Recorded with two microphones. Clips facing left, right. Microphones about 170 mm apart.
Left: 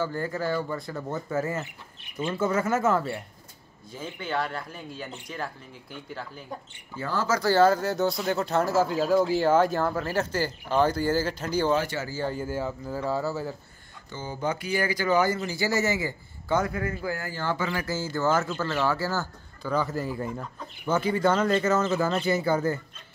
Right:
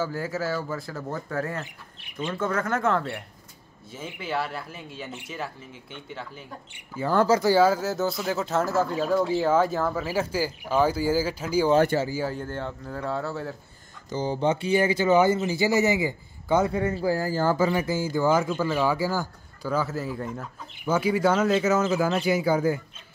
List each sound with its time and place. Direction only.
0.0 s speech: 5° right (ahead or behind)
7.2 s speech: 20° right (ahead or behind)
7.5 s speech: 5° right (ahead or behind)
12.4 s speech: 5° left (ahead or behind)
14.1 s speech: 30° right (ahead or behind)
17.8 s speech: 15° right (ahead or behind)